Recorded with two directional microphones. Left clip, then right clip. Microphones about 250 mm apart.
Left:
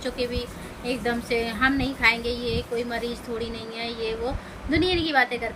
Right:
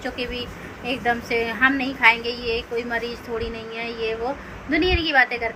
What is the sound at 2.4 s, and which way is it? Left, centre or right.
Speech, left.